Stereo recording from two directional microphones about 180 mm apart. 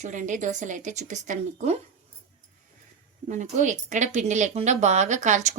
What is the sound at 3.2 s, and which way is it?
Speech, 45° right (ahead or behind).